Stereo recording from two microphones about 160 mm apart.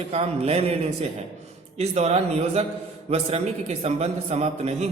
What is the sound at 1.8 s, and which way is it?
A man's voice, 40° right (ahead or behind).